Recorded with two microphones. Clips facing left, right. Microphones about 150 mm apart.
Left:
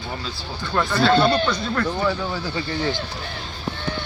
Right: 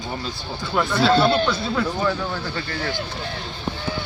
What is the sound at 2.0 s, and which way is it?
Speech, 5° left (ahead or behind).